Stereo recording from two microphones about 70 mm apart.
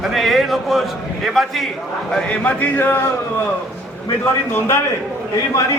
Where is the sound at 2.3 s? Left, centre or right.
Left.